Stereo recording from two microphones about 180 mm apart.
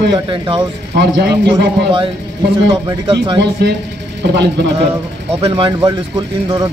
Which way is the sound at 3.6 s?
65° right (ahead or behind).